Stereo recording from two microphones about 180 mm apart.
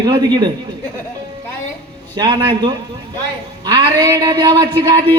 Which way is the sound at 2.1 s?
25° right (ahead or behind).